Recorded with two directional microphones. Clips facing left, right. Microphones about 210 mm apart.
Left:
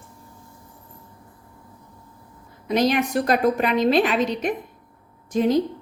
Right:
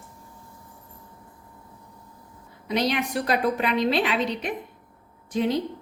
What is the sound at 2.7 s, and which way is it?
Speech, 45° left (ahead or behind).